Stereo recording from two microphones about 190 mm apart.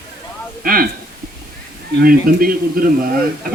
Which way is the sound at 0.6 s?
50° right (ahead or behind).